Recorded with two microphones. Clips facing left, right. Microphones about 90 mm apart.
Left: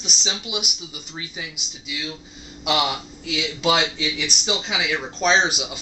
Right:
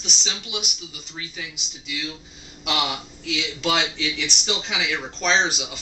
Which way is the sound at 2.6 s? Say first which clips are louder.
Left 3 dB; 5° left (ahead or behind).